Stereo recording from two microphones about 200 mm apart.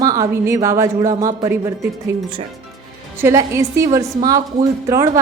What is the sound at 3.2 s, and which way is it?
A woman's voice, 15° right (ahead or behind).